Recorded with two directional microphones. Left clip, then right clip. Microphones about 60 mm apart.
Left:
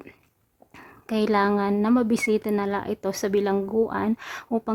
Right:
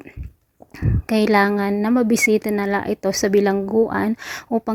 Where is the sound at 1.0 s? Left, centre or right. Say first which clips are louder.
Right 5 dB; right.